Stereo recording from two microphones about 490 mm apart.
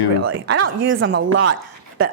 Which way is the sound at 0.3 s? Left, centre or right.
Right.